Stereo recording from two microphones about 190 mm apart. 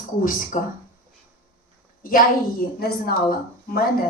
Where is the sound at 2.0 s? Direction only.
45° left (ahead or behind).